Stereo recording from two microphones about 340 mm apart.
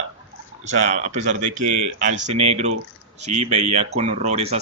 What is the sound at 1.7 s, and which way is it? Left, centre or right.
Speech, right.